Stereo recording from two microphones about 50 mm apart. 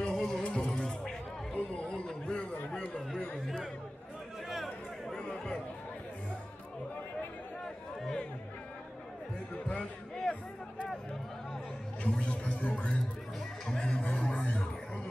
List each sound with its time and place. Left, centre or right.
0.1 s music: centre
0.4 s music: left
1.6 s a sound: left
2.7 s chatter: left
5.3 s chatter: centre
7.6 s chatter: centre
9.7 s music: left
12.0 s speech: left
13.7 s music: centre